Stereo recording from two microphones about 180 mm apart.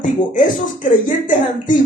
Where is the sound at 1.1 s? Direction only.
45° left (ahead or behind).